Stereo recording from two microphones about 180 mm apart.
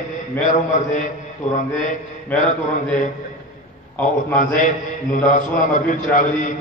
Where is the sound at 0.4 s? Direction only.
45° left (ahead or behind).